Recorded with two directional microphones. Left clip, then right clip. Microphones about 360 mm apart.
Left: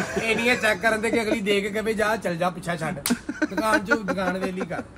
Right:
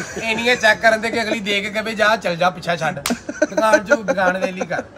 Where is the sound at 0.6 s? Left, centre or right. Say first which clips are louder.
Right 7 dB; right.